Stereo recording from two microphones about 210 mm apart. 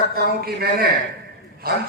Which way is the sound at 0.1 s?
45° right (ahead or behind).